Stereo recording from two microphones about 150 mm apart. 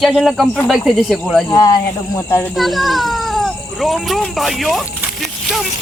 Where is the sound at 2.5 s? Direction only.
Centre (ahead or behind).